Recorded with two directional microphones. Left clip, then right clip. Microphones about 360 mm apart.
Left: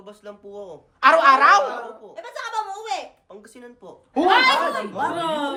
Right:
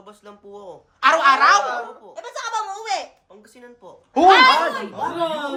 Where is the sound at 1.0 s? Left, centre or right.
Centre.